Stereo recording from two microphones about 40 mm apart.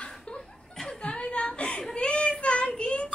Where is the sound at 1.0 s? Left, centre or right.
Left.